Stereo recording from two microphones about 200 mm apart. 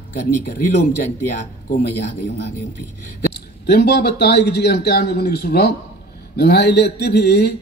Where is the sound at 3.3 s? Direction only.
55° left (ahead or behind).